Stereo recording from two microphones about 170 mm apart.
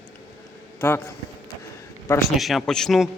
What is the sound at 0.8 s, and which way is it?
Speech, 15° left (ahead or behind).